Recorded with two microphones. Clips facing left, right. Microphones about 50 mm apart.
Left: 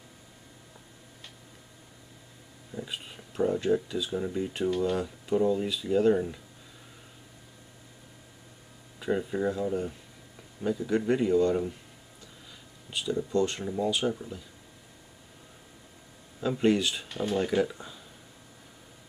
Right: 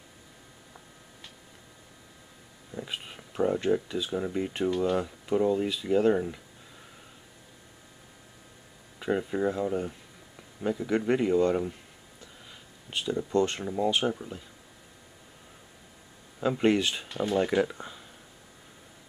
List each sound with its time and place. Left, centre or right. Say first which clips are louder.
2.7 s speech: right 1 dB; centre
9.0 s speech: right 1 dB; centre
12.9 s speech: right 1 dB; right
16.3 s speech: right 1 dB; centre